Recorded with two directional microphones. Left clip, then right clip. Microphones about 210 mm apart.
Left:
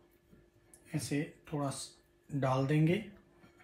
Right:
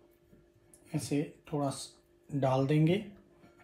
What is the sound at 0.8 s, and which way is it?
Speech, 10° right (ahead or behind).